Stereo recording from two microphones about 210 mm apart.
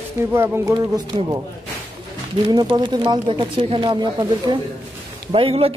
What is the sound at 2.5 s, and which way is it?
Speech, 20° right (ahead or behind).